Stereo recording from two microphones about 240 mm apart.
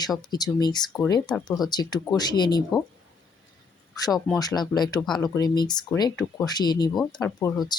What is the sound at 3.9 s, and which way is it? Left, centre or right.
Speech, centre.